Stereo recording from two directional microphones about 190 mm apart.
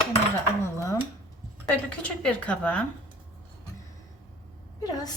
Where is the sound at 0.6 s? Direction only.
15° left (ahead or behind).